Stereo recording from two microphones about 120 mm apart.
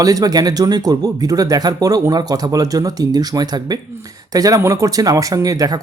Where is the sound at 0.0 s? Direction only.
30° right (ahead or behind).